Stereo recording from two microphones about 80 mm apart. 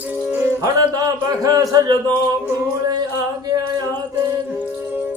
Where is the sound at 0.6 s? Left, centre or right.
Right.